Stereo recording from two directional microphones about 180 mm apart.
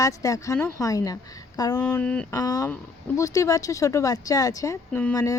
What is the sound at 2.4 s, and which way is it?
Speech, 20° left (ahead or behind).